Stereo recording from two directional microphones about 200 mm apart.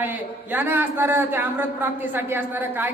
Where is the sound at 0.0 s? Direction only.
10° right (ahead or behind).